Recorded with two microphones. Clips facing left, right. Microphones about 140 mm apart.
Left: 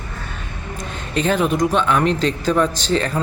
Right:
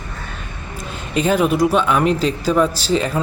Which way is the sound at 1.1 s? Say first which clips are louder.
Right 2 dB; 10° right (ahead or behind).